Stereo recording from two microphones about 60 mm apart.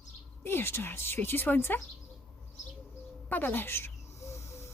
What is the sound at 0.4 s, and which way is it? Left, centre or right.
Speech, left.